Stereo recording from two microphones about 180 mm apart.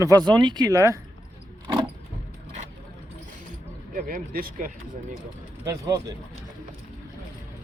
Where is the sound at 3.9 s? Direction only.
50° right (ahead or behind).